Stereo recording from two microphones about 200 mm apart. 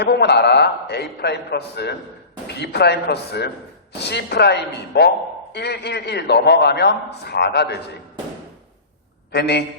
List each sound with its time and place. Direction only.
0.0 s a man's voice: 55° left (ahead or behind)
9.3 s a man's voice: 55° left (ahead or behind)